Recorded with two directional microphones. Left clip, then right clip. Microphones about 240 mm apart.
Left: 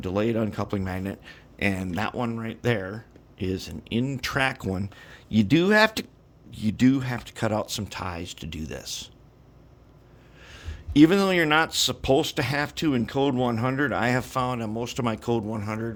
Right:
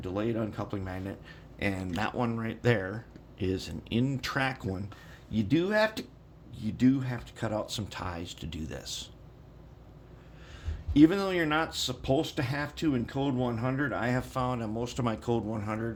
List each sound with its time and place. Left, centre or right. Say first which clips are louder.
0.0 s speech: left 6 dB; left
1.9 s speech: left 3 dB; left
10.4 s speech: left 5 dB; left